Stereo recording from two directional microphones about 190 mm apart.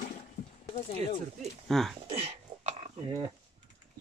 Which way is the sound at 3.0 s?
25° right (ahead or behind).